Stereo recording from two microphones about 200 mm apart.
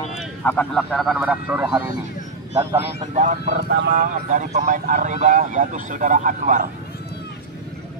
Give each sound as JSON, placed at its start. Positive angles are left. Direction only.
{"t": 0.2, "sound": "a sound", "side_deg": 5}
{"t": 0.8, "sound": "speech", "side_deg": 0}
{"t": 3.4, "sound": "speech", "side_deg": -55}